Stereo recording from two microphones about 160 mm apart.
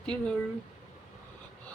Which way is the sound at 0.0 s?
5° left (ahead or behind).